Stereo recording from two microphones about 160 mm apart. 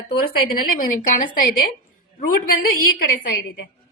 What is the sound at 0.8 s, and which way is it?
Speech, 55° left (ahead or behind).